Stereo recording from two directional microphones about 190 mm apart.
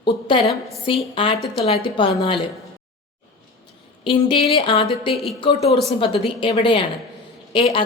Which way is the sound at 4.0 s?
25° left (ahead or behind).